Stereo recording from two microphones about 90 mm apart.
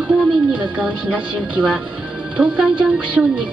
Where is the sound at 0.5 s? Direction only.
15° right (ahead or behind).